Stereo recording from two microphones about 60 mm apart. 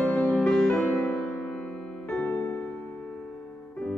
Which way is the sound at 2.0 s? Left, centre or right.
Centre.